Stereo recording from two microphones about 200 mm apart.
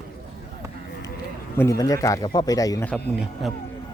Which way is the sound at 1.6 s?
15° left (ahead or behind).